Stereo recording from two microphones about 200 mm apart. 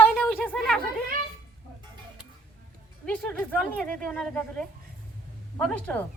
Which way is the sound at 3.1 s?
5° left (ahead or behind).